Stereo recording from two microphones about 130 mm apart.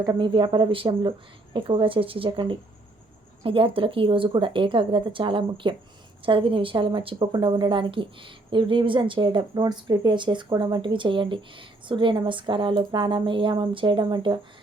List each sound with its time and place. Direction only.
0.0 s speech: 30° right (ahead or behind)
0.3 s a woman's voice: 40° right (ahead or behind)